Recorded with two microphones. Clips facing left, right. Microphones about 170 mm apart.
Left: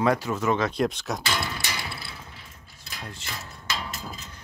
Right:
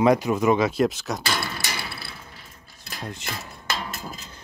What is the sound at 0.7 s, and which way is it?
Speech, 5° right (ahead or behind).